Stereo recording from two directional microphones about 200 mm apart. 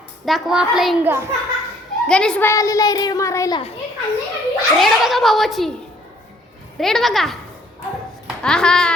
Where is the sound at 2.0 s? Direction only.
5° left (ahead or behind).